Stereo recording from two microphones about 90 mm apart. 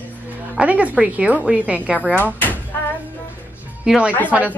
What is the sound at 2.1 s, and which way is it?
Speech, 20° left (ahead or behind).